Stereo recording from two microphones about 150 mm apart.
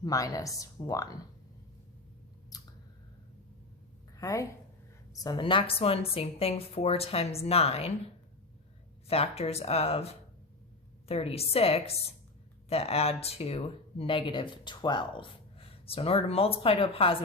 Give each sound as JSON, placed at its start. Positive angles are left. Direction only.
{"t": 0.0, "sound": "speech", "side_deg": 25}
{"t": 2.5, "sound": "a sound", "side_deg": 25}
{"t": 4.2, "sound": "speech", "side_deg": 20}
{"t": 5.2, "sound": "speech", "side_deg": 30}
{"t": 9.0, "sound": "speech", "side_deg": 40}